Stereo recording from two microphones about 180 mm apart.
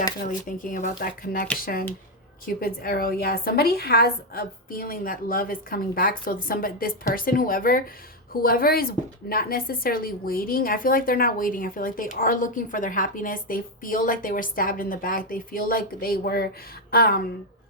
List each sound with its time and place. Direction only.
0.3 s a woman's voice: 50° left (ahead or behind)